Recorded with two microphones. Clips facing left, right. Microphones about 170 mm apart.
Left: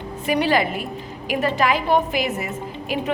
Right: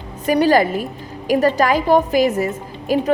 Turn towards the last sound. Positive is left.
turn(degrees=-40)  # may be behind; listen again after turning